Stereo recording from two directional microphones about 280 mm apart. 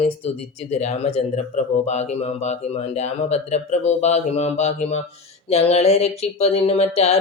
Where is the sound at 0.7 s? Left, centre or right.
Left.